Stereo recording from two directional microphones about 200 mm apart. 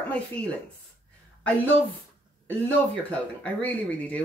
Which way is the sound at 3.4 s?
5° left (ahead or behind).